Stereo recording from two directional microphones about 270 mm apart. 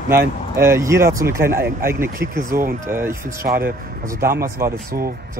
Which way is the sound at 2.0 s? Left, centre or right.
Right.